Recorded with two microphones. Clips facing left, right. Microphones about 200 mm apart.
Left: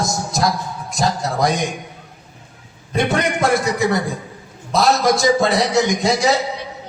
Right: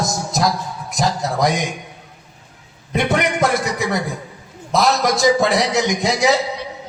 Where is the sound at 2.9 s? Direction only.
20° right (ahead or behind).